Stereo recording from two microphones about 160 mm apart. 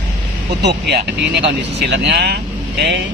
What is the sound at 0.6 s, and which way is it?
Speech, 90° right.